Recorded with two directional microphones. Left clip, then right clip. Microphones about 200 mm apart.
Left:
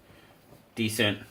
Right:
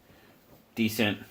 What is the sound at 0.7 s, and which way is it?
Speech, 35° right (ahead or behind).